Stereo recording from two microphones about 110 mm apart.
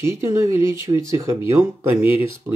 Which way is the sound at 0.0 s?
25° right (ahead or behind).